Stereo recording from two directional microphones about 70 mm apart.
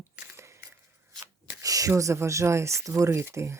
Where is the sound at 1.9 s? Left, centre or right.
Right.